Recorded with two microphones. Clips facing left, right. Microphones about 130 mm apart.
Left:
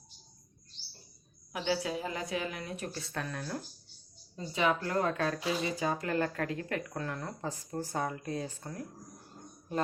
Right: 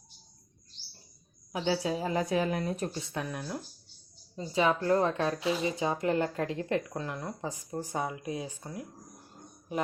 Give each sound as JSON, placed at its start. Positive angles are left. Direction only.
{"t": 1.6, "sound": "a woman's voice", "side_deg": -30}
{"t": 2.9, "sound": "a woman's voice", "side_deg": -15}
{"t": 4.4, "sound": "speech", "side_deg": -30}